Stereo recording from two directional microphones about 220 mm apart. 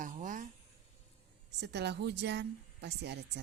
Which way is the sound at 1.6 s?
50° right (ahead or behind).